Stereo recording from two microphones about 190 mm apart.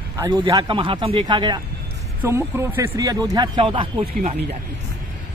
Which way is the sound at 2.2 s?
15° right (ahead or behind).